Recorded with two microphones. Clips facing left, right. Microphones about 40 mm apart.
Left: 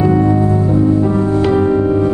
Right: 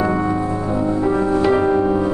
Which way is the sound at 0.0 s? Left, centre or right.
Centre.